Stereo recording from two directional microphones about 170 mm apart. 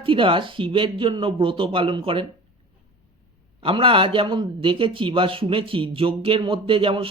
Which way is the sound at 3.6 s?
30° right (ahead or behind).